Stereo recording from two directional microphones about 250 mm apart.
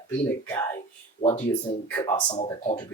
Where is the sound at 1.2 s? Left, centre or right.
Left.